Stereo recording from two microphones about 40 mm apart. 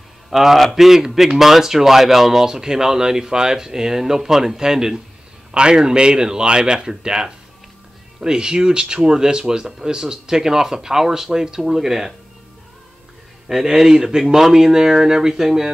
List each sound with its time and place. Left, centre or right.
0.3 s a man's voice: centre
13.5 s a man's voice: centre